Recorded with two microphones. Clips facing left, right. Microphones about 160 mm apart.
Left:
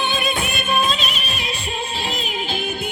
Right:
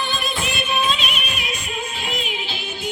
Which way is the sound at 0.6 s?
40° left (ahead or behind).